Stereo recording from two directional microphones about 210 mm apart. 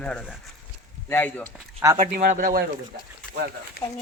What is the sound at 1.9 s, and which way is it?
Speech, 45° right (ahead or behind).